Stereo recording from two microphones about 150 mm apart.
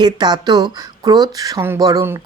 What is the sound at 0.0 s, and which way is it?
A man's voice, 30° right (ahead or behind).